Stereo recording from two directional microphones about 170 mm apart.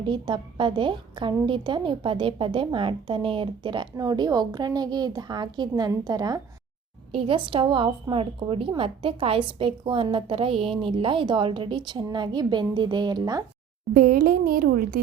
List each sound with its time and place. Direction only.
0.0 s a woman's voice: 30° right (ahead or behind)
13.9 s speech: 60° right (ahead or behind)